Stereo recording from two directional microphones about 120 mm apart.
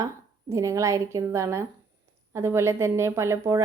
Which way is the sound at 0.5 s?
25° right (ahead or behind).